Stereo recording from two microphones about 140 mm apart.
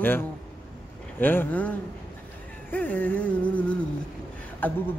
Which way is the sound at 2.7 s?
10° left (ahead or behind).